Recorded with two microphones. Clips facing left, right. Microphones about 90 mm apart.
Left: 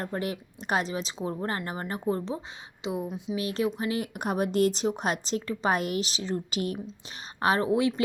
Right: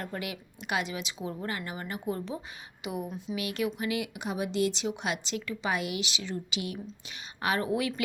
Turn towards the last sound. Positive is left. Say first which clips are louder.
# left 5 dB
turn(degrees=25)  # may be behind; listen again after turning